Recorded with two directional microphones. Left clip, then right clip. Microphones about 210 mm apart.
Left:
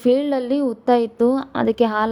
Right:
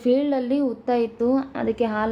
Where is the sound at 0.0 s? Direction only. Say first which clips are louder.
Left 3 dB; 35° left (ahead or behind).